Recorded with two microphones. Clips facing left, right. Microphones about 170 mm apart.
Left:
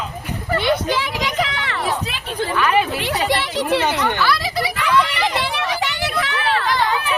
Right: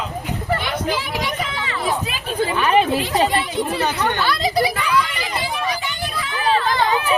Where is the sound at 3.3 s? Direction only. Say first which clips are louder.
Left 2 dB; 80° left.